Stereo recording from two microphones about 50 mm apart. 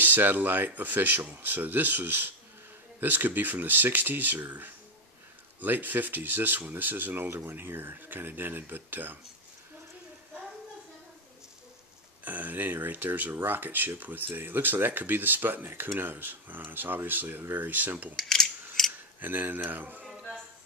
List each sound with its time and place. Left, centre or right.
0.0 s speech: right
12.3 s speech: right
15.7 s speech: right
16.0 s speech: right
18.1 s a sound: centre
19.1 s speech: right